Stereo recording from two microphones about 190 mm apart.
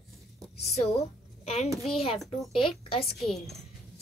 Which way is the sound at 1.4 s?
35° left (ahead or behind).